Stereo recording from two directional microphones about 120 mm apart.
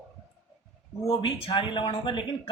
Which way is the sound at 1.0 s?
50° left (ahead or behind).